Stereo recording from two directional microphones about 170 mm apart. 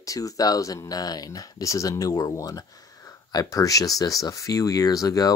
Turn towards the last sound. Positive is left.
turn(degrees=20)  # may be behind; listen again after turning